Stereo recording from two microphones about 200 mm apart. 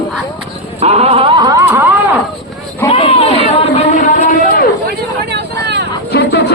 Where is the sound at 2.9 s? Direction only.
30° left (ahead or behind).